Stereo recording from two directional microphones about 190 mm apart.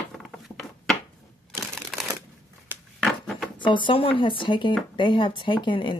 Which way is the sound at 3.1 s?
Centre (ahead or behind).